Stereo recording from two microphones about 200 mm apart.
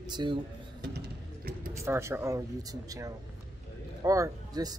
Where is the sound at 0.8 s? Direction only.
50° right (ahead or behind).